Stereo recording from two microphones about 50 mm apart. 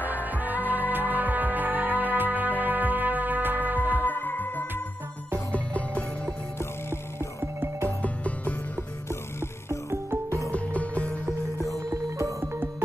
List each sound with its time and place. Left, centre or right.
0.0 s music: left
0.3 s music: right
4.1 s music: left
5.5 s music: left
6.6 s music: left
8.0 s music: left
9.7 s music: right
10.5 s music: left
12.2 s music: right